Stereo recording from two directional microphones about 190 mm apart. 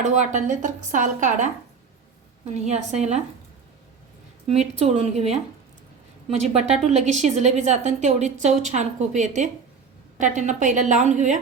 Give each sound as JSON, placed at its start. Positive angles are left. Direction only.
{"t": 0.0, "sound": "a woman's voice", "side_deg": -40}
{"t": 4.4, "sound": "a woman's voice", "side_deg": -35}